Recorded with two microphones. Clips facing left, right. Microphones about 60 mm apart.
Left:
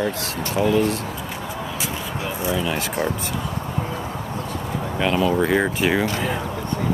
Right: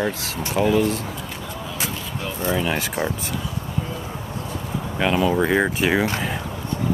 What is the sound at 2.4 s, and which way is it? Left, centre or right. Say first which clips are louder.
Speech: right 2 dB; right.